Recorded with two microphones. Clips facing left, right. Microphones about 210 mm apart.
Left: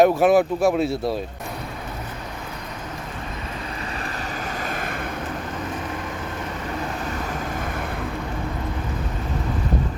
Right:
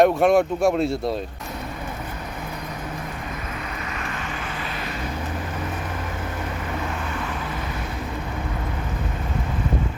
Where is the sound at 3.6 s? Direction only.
30° left (ahead or behind); by 5.0 s 50° left (ahead or behind).